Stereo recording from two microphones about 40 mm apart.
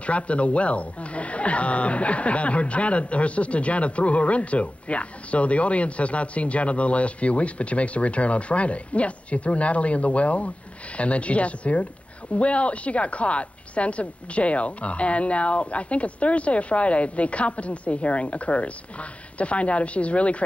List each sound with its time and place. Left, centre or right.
0.0 s speech: left